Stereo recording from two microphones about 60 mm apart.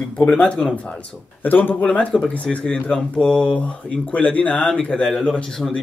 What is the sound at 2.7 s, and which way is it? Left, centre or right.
Speech, centre.